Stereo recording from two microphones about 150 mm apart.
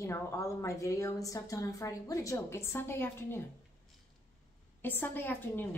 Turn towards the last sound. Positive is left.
turn(degrees=15)  # may be behind; listen again after turning